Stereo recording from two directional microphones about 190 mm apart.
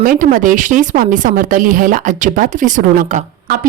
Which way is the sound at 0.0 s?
50° right (ahead or behind).